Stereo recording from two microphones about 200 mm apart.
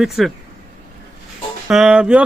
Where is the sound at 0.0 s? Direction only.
Centre (ahead or behind).